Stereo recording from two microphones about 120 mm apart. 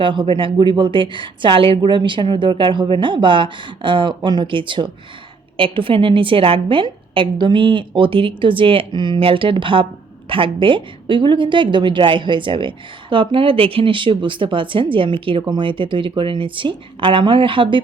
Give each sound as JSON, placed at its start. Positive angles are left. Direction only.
{"t": 0.0, "sound": "a woman's voice", "side_deg": -45}